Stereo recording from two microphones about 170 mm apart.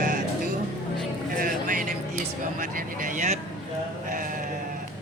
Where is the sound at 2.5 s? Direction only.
50° right (ahead or behind).